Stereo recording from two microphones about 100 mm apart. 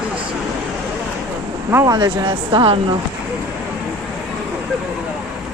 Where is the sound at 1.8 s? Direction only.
45° right (ahead or behind).